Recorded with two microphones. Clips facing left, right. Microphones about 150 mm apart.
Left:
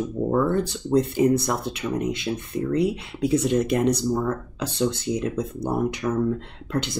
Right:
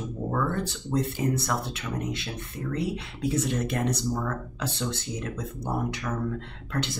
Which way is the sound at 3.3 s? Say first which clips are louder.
Left 8 dB; 15° left (ahead or behind).